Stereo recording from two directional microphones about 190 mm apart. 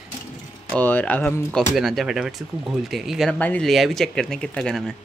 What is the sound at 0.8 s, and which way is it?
Speech, 10° left (ahead or behind).